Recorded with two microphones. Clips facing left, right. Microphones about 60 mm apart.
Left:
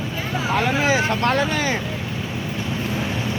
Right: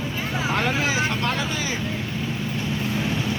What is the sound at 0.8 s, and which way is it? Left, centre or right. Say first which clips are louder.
Vehicle: left 4 dB; left.